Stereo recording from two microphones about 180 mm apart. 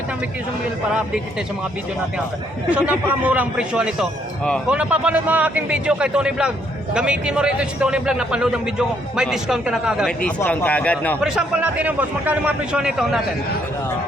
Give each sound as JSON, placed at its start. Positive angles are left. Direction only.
{"t": 2.6, "sound": "a man's voice", "side_deg": -5}
{"t": 10.2, "sound": "speech", "side_deg": 5}
{"t": 11.2, "sound": "a man's voice", "side_deg": -5}